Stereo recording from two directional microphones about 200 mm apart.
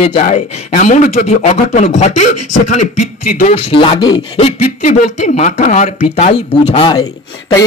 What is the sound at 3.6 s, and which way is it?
Speech, 25° left (ahead or behind).